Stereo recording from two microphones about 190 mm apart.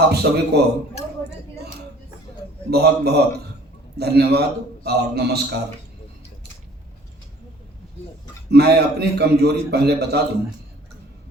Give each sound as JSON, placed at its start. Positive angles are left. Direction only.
{"t": 0.1, "sound": "a man's voice", "side_deg": -60}
{"t": 2.6, "sound": "a man's voice", "side_deg": -60}
{"t": 8.4, "sound": "a man's voice", "side_deg": -60}